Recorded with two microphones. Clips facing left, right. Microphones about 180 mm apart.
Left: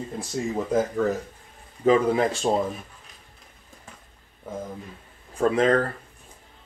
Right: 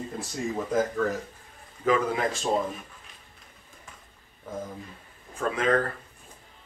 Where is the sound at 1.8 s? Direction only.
30° left (ahead or behind).